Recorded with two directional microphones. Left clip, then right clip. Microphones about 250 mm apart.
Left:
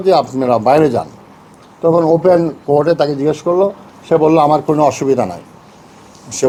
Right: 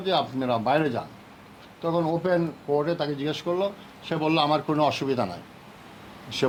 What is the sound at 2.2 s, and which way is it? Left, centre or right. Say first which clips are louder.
A man's voice: left 14 dB; left.